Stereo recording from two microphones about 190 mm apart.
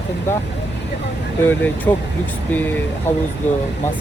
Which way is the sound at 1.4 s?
10° left (ahead or behind).